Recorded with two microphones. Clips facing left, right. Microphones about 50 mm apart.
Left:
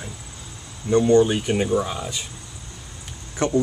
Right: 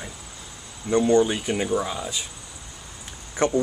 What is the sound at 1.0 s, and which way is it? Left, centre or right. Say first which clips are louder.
Speech: left 2 dB; centre.